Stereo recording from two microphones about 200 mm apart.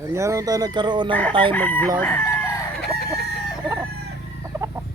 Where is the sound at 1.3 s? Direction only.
25° right (ahead or behind).